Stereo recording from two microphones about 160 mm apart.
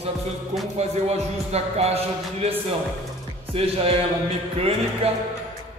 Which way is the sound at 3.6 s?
35° right (ahead or behind).